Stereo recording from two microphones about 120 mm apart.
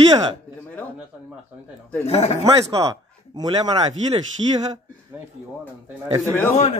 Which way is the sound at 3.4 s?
50° right (ahead or behind).